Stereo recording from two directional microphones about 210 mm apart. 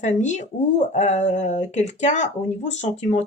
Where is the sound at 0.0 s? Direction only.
35° left (ahead or behind).